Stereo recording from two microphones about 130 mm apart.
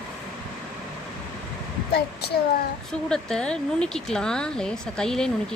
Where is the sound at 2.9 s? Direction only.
5° left (ahead or behind).